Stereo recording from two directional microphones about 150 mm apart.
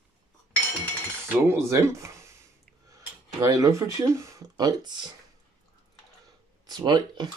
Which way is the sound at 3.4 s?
20° right (ahead or behind).